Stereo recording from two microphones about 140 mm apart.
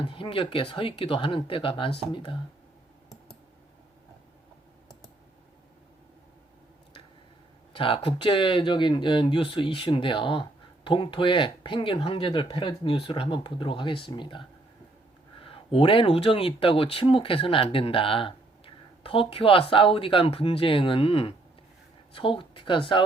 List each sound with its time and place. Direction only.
0.0 s speech: 40° left (ahead or behind)
7.7 s speech: 40° left (ahead or behind)